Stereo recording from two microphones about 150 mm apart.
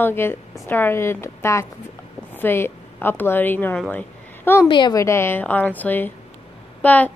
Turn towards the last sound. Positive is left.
turn(degrees=10)  # may be behind; listen again after turning